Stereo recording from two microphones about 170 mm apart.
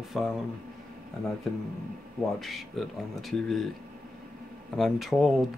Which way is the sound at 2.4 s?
Centre (ahead or behind).